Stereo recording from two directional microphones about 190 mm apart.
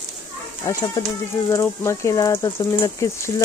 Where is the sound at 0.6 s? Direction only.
15° left (ahead or behind).